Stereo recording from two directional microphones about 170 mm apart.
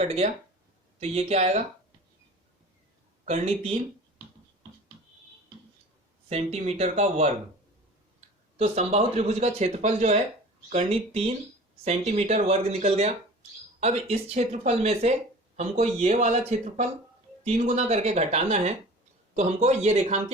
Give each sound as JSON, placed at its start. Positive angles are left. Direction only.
{"t": 0.0, "sound": "speech", "side_deg": -40}
{"t": 3.2, "sound": "speech", "side_deg": -40}
{"t": 6.2, "sound": "speech", "side_deg": -40}
{"t": 8.5, "sound": "a man's voice", "side_deg": -40}